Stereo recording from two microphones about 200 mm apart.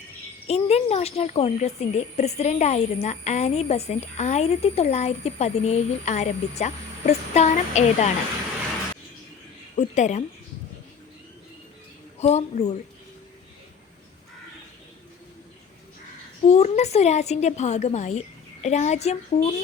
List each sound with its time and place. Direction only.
0.4 s a woman's voice: 30° left (ahead or behind)
9.7 s a woman's voice: 35° left (ahead or behind)
12.2 s a woman's voice: 35° left (ahead or behind)
16.5 s a woman's voice: 35° left (ahead or behind)